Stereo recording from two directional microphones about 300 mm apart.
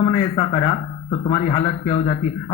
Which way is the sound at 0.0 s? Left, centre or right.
Centre.